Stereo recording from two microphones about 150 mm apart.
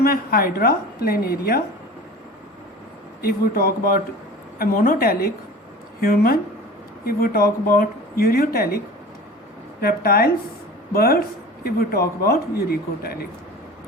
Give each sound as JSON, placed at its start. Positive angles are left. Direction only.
{"t": 0.0, "sound": "speech", "side_deg": 80}
{"t": 3.2, "sound": "speech", "side_deg": 85}
{"t": 7.0, "sound": "speech", "side_deg": 90}
{"t": 9.8, "sound": "speech", "side_deg": 85}